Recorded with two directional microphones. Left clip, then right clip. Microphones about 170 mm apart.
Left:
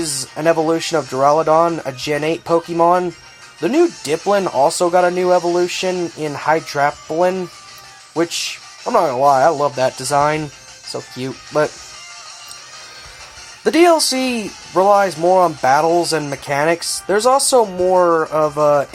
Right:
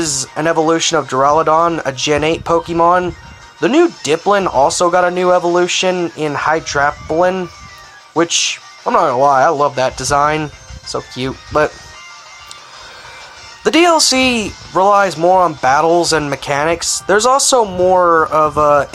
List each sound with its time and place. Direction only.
0.3 s speech: 20° right (ahead or behind)
13.7 s speech: 20° right (ahead or behind)